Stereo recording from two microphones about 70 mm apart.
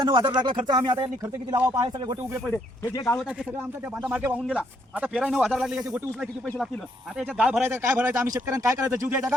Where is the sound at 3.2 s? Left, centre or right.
Centre.